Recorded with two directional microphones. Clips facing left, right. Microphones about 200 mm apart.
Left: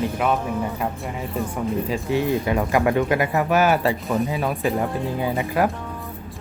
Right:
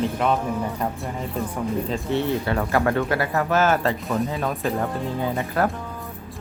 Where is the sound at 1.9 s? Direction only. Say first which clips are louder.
Left 3 dB; 10° left (ahead or behind).